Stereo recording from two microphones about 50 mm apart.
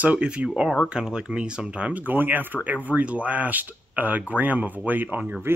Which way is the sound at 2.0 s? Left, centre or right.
Right.